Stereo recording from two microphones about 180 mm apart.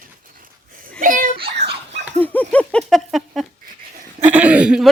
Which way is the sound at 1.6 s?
40° right (ahead or behind).